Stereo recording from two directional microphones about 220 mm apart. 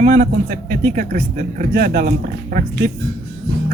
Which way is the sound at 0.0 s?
35° right (ahead or behind).